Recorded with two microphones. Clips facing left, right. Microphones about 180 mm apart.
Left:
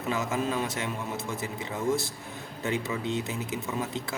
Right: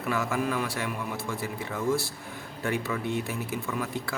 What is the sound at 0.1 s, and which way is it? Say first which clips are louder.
Speech: right 1 dB; 20° left (ahead or behind).